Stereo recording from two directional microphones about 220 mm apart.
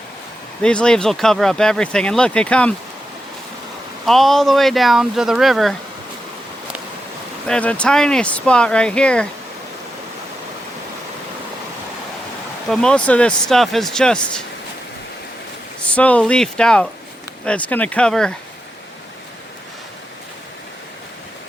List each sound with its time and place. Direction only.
0.6 s speech: 5° left (ahead or behind)
4.0 s speech: centre (ahead or behind)
7.4 s speech: 5° left (ahead or behind)
12.7 s speech: 5° left (ahead or behind)
15.8 s speech: 5° left (ahead or behind)